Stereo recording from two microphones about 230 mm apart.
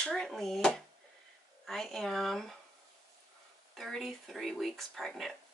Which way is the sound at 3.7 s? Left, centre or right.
Centre.